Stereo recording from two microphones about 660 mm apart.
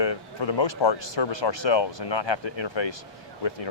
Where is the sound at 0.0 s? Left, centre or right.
Left.